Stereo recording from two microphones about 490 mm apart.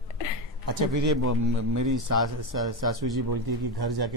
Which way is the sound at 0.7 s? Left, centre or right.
Right.